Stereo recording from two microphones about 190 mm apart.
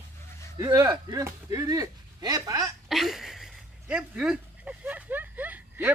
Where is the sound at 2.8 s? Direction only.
Centre (ahead or behind).